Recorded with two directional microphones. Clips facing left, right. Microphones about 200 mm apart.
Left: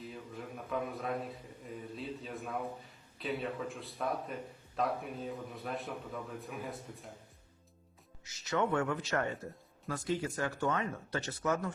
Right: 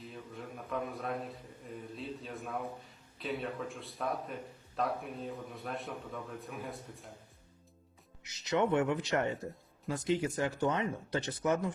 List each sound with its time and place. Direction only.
0.0 s a man's voice: centre (ahead or behind)
8.2 s speech: 20° right (ahead or behind)